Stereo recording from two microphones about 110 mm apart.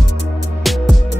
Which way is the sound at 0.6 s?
Centre (ahead or behind).